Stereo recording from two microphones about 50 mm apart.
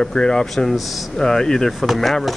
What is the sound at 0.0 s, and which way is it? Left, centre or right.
Speech, centre.